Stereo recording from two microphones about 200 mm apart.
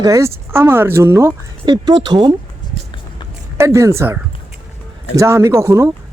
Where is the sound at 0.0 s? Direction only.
15° right (ahead or behind).